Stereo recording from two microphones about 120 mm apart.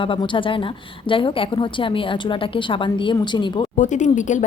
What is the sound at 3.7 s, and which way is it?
Speech, 90° left.